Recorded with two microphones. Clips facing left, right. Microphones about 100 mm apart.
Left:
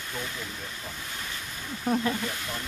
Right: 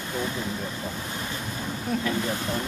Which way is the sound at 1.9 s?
40° left (ahead or behind).